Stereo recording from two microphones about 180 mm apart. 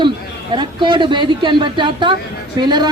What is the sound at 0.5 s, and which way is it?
A woman's voice, 25° right (ahead or behind).